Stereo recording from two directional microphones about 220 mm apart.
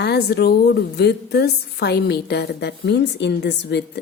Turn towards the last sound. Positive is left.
turn(degrees=50)  # may be behind; listen again after turning